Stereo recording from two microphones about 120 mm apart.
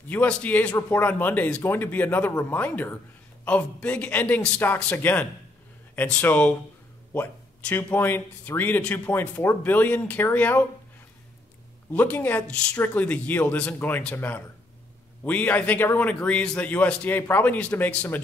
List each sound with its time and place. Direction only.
0.1 s speech: 15° left (ahead or behind)
11.9 s speech: 15° left (ahead or behind)